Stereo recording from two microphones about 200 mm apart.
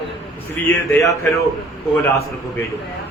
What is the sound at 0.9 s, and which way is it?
Speech, 15° left (ahead or behind).